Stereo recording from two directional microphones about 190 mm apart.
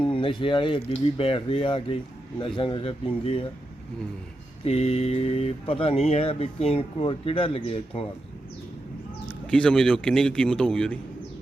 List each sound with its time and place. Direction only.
0.0 s a man's voice: 25° left (ahead or behind)
4.6 s speech: 30° left (ahead or behind)
9.5 s a man's voice: 5° left (ahead or behind)